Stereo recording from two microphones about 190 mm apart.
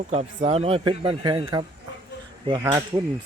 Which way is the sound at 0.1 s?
35° right (ahead or behind).